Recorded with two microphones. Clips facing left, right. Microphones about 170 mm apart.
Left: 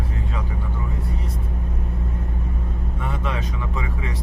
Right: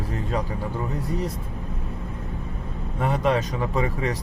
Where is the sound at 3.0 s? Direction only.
40° right (ahead or behind).